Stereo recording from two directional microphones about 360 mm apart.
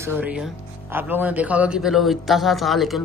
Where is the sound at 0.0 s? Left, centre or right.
Centre.